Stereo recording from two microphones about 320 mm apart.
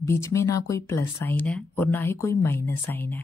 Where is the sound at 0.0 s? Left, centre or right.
Centre.